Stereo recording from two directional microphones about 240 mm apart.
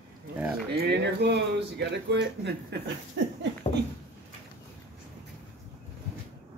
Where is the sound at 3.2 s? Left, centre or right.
Right.